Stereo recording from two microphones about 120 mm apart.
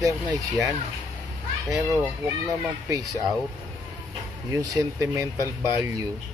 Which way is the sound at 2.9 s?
30° right (ahead or behind).